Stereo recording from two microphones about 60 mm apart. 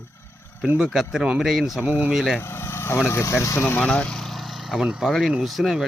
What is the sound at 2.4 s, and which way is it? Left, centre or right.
Vehicle, left.